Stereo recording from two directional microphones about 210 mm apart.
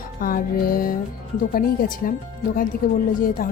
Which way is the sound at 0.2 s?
45° left (ahead or behind).